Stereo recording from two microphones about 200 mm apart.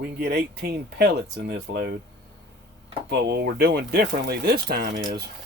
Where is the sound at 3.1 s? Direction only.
55° right (ahead or behind).